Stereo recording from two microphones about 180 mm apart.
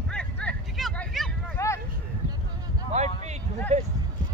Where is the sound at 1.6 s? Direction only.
15° left (ahead or behind).